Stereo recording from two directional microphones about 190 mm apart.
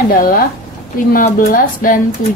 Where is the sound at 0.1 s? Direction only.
50° left (ahead or behind).